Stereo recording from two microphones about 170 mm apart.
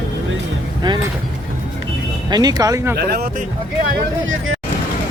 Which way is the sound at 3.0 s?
65° right (ahead or behind).